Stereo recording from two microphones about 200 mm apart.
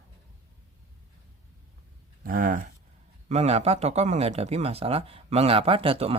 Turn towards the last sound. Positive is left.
turn(degrees=-30)  # may be behind; listen again after turning